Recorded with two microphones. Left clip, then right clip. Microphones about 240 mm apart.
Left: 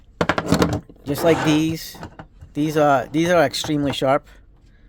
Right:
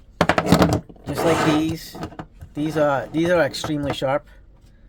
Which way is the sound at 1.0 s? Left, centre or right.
Left.